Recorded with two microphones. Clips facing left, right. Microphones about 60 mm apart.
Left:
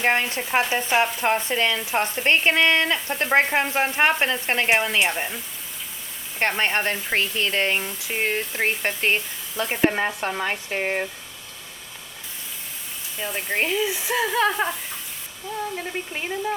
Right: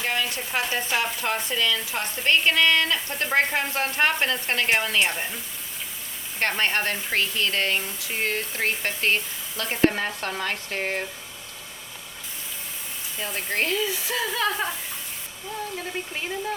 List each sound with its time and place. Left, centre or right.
0.0 s speech: left; by 5.4 s centre
6.6 s speech: left
13.1 s speech: centre